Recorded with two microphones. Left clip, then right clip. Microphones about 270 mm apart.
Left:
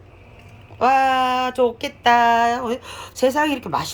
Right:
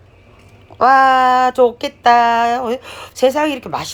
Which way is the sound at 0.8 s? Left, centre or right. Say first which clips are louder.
Right 6 dB; centre.